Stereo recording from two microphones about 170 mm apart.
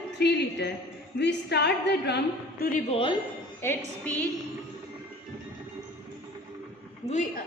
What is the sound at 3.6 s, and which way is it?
Speech, 10° left (ahead or behind).